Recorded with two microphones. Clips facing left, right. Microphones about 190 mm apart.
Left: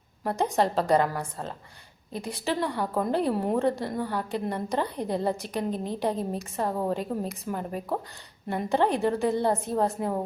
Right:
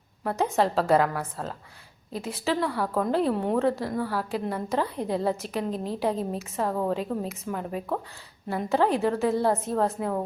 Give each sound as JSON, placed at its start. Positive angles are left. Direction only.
{"t": 0.3, "sound": "a woman's voice", "side_deg": 0}